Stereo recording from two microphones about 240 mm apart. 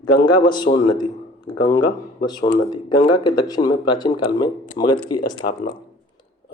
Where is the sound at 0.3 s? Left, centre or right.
Centre.